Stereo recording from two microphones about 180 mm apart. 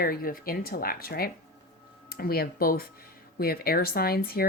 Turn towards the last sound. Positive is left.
turn(degrees=55)  # may be behind; listen again after turning